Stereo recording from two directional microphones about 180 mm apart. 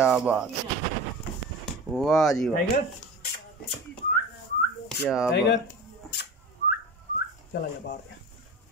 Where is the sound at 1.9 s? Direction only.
Centre (ahead or behind).